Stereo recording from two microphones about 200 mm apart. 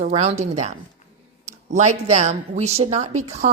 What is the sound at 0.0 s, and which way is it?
A woman's voice, 30° right (ahead or behind).